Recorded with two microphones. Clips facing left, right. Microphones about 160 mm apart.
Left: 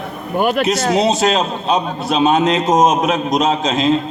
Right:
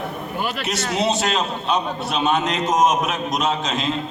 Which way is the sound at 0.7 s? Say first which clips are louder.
Left 7 dB; 40° left (ahead or behind).